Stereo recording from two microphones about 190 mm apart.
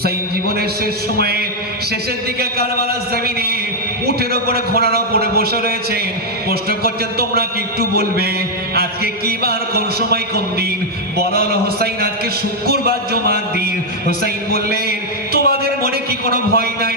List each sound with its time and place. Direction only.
1.2 s music: 55° right (ahead or behind)
4.0 s music: 55° right (ahead or behind)
11.2 s speech: 55° right (ahead or behind)
14.1 s a sound: 55° right (ahead or behind)
16.3 s music: 55° right (ahead or behind)